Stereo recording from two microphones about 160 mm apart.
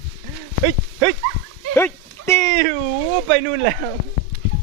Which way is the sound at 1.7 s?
15° left (ahead or behind).